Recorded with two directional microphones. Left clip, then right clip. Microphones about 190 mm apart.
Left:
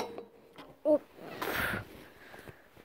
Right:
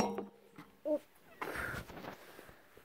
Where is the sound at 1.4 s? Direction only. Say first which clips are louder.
Left 7 dB; 25° left (ahead or behind).